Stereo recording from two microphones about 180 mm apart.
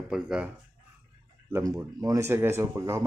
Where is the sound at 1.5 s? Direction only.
15° right (ahead or behind).